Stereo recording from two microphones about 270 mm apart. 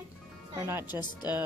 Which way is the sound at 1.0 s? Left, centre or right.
Centre.